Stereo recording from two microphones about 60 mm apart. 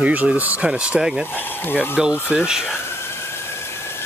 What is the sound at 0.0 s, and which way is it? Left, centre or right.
Speech, right.